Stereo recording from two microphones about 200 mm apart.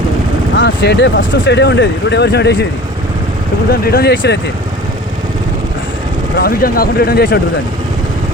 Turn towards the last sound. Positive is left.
turn(degrees=50)  # may be behind; listen again after turning